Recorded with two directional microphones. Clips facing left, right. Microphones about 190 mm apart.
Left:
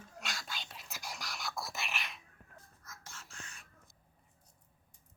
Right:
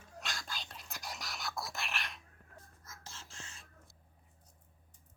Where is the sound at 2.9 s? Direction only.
30° right (ahead or behind).